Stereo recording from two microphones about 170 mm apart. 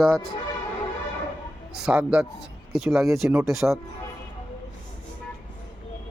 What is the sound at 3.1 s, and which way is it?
Speech, 15° right (ahead or behind).